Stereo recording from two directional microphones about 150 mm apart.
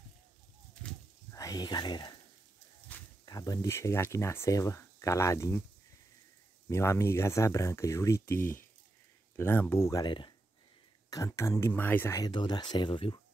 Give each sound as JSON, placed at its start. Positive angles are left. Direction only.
{"t": 1.3, "sound": "speech", "side_deg": 25}
{"t": 2.9, "sound": "a sound", "side_deg": 10}
{"t": 3.3, "sound": "speech", "side_deg": 25}
{"t": 6.7, "sound": "speech", "side_deg": 20}
{"t": 12.2, "sound": "speech", "side_deg": 30}